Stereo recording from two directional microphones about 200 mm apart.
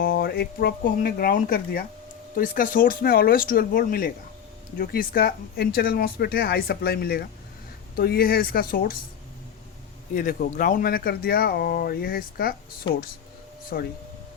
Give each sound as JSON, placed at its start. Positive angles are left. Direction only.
{"t": 0.0, "sound": "speech", "side_deg": 50}
{"t": 10.2, "sound": "speech", "side_deg": 40}
{"t": 12.9, "sound": "speech", "side_deg": 25}
{"t": 13.7, "sound": "speech", "side_deg": 50}